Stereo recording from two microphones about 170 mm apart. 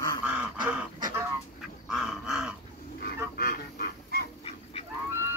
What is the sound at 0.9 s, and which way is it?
Chicken, 20° right (ahead or behind).